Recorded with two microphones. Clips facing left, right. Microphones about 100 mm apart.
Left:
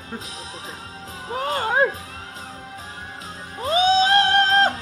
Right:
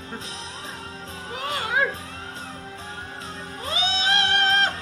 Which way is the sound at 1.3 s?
35° left (ahead or behind).